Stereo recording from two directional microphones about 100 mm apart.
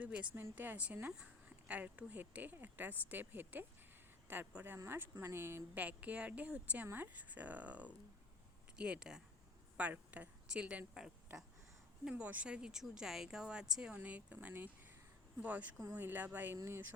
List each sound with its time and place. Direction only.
0.0 s speech: 15° right (ahead or behind)